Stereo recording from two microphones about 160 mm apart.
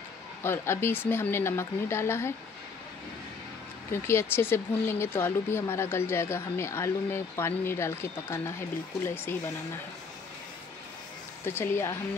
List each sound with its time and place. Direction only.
0.4 s speech: 15° left (ahead or behind)
3.9 s speech: 15° left (ahead or behind)
11.4 s speech: 15° left (ahead or behind)